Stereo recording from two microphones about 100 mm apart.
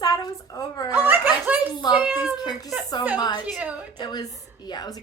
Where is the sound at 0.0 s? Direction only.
40° left (ahead or behind).